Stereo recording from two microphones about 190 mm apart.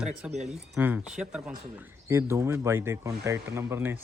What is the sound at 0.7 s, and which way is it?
Speech, 5° right (ahead or behind).